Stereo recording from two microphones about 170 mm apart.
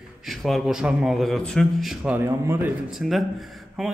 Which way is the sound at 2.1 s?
15° right (ahead or behind).